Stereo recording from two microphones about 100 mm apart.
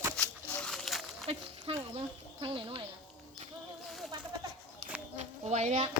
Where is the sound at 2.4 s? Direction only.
60° right (ahead or behind).